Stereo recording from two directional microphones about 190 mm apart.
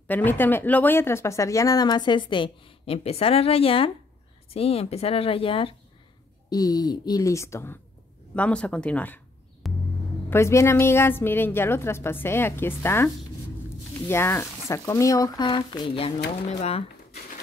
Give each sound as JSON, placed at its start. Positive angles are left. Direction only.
{"t": 0.1, "sound": "a woman's voice", "side_deg": 10}